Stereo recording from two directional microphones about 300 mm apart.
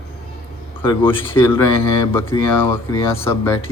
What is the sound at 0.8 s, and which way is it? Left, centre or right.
Speech, centre.